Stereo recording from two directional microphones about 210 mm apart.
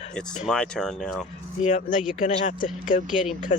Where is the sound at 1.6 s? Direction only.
35° left (ahead or behind).